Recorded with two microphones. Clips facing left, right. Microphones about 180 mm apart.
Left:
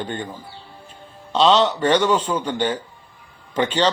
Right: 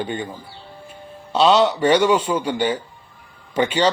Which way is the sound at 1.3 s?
10° right (ahead or behind).